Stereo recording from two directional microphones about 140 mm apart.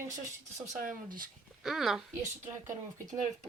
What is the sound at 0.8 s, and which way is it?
Speech, 75° right (ahead or behind).